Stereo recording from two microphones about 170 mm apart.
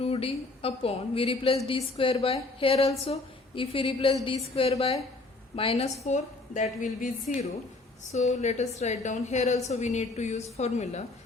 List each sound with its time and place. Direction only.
0.0 s a woman's voice: 35° left (ahead or behind)